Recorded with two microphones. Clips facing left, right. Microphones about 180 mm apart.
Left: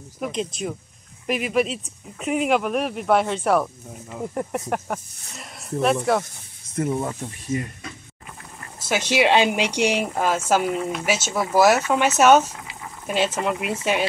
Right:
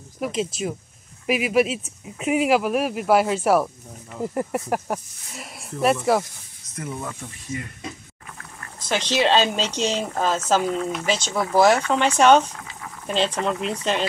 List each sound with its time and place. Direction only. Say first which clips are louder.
0.2 s speech: right 2 dB; 5° right (ahead or behind)
6.7 s speech: left 8 dB; 30° left (ahead or behind)
8.7 s speech: left 2 dB; 10° left (ahead or behind)